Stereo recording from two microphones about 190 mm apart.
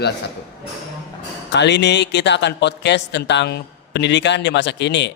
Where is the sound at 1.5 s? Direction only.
65° left (ahead or behind).